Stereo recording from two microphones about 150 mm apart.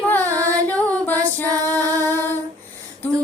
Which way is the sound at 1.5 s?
25° right (ahead or behind).